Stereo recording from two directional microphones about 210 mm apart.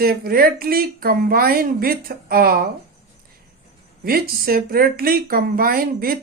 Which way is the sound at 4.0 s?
45° right (ahead or behind).